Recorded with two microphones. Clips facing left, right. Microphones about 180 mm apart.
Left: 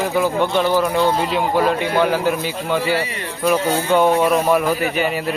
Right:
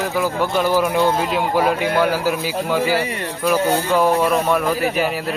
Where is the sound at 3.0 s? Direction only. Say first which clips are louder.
Right 2 dB; 50° right (ahead or behind).